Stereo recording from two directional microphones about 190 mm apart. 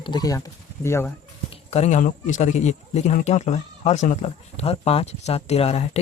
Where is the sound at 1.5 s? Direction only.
35° left (ahead or behind).